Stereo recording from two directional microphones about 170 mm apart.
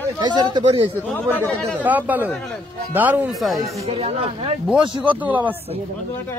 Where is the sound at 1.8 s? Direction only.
10° right (ahead or behind).